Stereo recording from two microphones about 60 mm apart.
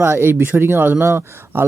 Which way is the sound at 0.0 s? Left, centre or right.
Right.